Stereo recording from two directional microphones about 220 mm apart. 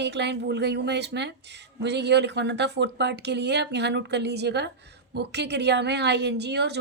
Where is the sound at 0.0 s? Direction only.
50° right (ahead or behind).